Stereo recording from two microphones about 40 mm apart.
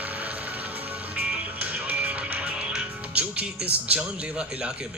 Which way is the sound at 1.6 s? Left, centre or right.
Right.